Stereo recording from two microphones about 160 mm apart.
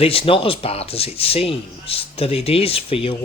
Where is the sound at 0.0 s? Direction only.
35° left (ahead or behind).